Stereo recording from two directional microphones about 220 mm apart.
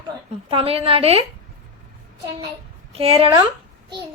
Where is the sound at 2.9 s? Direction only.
25° right (ahead or behind).